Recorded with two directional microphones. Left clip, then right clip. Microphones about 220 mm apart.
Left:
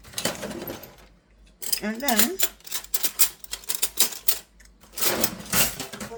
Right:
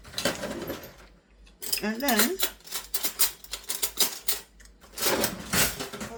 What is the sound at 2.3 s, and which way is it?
Typewriter, 40° left (ahead or behind).